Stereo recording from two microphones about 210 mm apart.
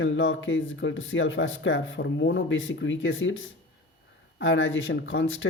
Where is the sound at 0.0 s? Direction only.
65° left (ahead or behind).